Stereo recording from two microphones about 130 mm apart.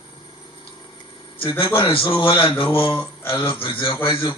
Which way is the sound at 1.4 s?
45° left (ahead or behind).